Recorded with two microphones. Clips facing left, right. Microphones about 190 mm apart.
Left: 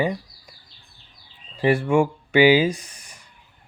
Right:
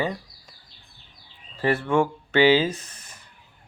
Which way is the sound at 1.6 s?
10° left (ahead or behind).